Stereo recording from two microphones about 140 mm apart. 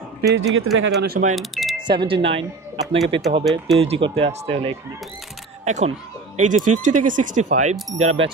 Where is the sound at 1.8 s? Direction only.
35° right (ahead or behind).